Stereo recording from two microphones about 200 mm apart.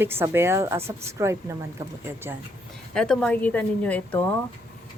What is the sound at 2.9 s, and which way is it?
Speech, 5° left (ahead or behind).